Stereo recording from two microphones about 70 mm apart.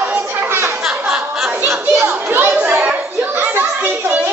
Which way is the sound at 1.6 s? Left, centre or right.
Right.